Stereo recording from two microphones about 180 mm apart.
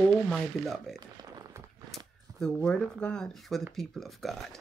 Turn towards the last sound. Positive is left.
turn(degrees=0)  # may be behind; listen again after turning